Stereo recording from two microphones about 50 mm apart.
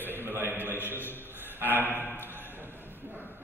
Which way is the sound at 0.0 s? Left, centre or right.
Right.